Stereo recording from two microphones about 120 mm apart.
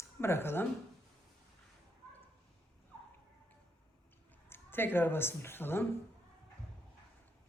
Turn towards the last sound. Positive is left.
turn(degrees=20)  # may be behind; listen again after turning